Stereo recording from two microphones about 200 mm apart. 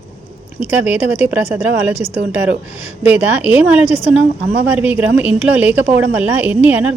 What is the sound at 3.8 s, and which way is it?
Speech, 35° left (ahead or behind).